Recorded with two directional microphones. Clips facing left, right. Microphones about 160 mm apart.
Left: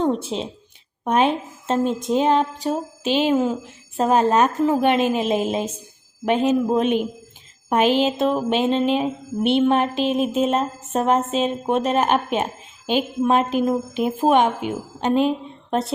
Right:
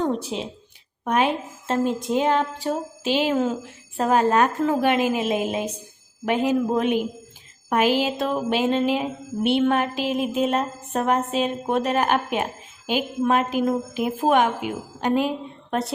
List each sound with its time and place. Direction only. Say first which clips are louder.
0.0 s a woman's voice: left 3 dB; 25° left (ahead or behind)